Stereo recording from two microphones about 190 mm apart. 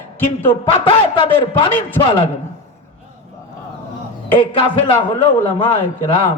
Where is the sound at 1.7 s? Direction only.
10° left (ahead or behind).